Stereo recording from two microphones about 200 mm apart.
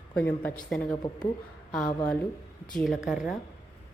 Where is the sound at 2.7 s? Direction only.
Centre (ahead or behind).